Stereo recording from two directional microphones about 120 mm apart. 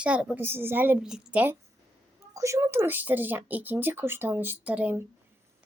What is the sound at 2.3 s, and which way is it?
Speech, 25° right (ahead or behind).